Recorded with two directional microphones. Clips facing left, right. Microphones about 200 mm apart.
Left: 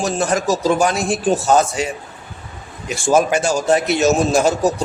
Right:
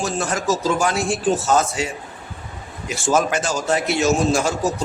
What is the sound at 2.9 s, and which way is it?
A man's voice, 10° left (ahead or behind).